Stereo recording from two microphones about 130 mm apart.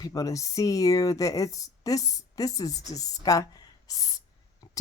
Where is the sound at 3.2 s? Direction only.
25° left (ahead or behind).